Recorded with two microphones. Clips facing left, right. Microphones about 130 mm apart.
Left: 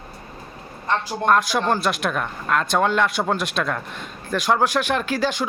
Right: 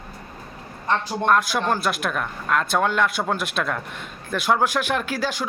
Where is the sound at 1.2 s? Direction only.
Centre (ahead or behind).